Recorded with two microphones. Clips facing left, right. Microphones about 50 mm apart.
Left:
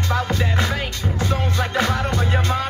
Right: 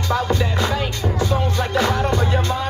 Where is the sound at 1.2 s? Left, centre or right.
Left.